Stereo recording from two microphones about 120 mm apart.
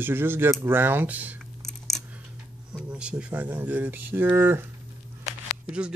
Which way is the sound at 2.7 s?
5° right (ahead or behind).